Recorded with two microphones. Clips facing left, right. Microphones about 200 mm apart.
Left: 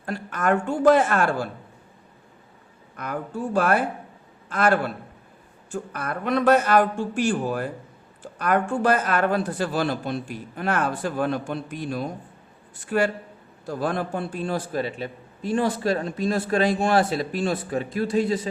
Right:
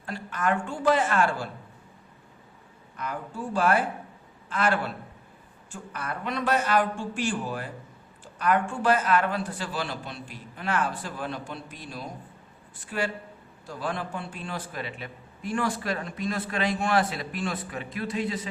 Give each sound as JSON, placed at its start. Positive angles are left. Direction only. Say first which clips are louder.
{"t": 0.0, "sound": "speech", "louder": "left 3 dB", "side_deg": 50}
{"t": 2.9, "sound": "a man's voice", "louder": "left 4 dB", "side_deg": 50}